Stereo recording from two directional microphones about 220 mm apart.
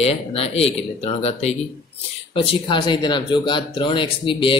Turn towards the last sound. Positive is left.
turn(degrees=25)  # may be behind; listen again after turning